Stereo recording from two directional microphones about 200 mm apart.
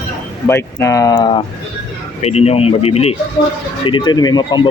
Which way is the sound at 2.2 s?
30° left (ahead or behind).